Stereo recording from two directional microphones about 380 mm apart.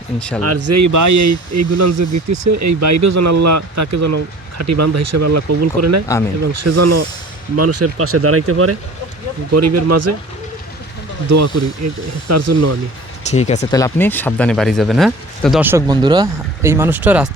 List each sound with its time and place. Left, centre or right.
0.2 s speech: centre
0.4 s speech: right
11.3 s speech: right
13.3 s speech: centre